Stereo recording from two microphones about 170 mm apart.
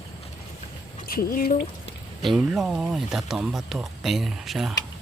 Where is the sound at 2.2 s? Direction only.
Centre (ahead or behind).